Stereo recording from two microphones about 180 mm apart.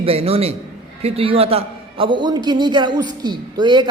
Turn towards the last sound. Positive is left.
turn(degrees=-25)  # may be behind; listen again after turning